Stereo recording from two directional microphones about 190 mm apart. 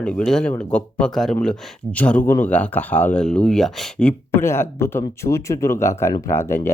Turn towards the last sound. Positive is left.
turn(degrees=15)  # may be behind; listen again after turning